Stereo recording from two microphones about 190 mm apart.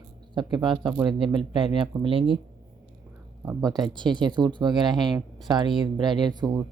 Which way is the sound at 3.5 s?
20° right (ahead or behind).